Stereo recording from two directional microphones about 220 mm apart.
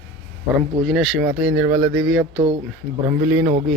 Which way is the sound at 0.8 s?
Centre (ahead or behind).